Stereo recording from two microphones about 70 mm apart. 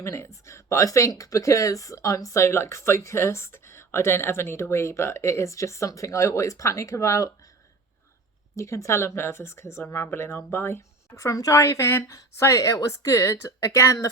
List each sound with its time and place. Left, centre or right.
0.0 s speech: left
8.5 s speech: left
11.3 s speech: left
12.1 s speech: left